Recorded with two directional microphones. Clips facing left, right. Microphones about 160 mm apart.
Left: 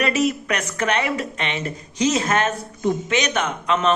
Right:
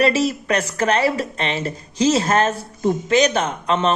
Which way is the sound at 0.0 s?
30° right (ahead or behind).